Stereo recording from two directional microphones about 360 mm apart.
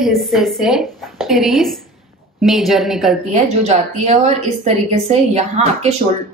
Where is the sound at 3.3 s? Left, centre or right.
Centre.